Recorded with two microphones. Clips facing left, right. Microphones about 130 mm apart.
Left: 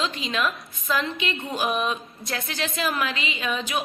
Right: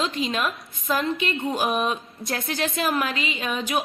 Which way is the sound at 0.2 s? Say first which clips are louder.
Right 1 dB; 45° right (ahead or behind).